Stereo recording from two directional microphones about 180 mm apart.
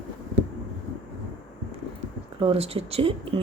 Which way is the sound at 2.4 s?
35° right (ahead or behind).